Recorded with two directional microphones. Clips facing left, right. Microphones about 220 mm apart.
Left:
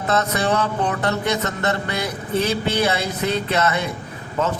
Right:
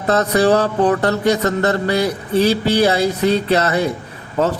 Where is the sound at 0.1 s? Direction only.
35° right (ahead or behind).